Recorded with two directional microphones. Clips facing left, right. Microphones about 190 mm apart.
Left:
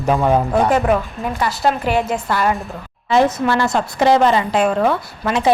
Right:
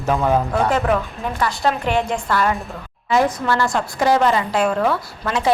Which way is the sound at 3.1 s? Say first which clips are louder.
Left 3 dB; 25° left (ahead or behind).